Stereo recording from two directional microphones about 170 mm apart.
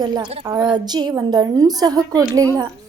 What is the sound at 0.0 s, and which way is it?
A woman's voice, 25° right (ahead or behind).